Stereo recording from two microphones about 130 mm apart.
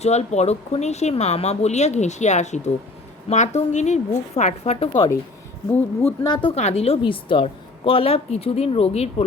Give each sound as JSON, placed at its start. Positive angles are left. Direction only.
{"t": 0.0, "sound": "speech", "side_deg": 60}
{"t": 5.7, "sound": "speech", "side_deg": 20}
{"t": 6.2, "sound": "speech", "side_deg": 40}
{"t": 6.6, "sound": "a woman's voice", "side_deg": 55}